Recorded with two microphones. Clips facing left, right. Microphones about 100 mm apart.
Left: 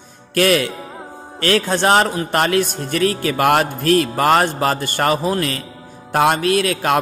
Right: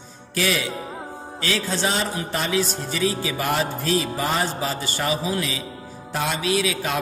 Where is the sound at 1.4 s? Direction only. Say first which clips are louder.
Left 8 dB; 60° left (ahead or behind).